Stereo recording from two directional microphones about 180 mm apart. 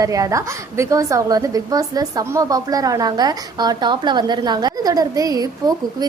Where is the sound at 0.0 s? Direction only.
20° right (ahead or behind).